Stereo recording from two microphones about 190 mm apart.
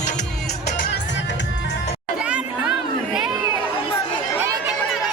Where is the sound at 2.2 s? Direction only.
5° right (ahead or behind).